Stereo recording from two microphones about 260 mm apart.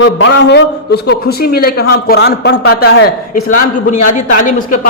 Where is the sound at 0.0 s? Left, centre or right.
Left.